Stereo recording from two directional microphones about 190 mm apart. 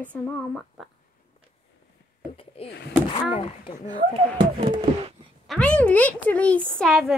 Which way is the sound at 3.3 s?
30° left (ahead or behind).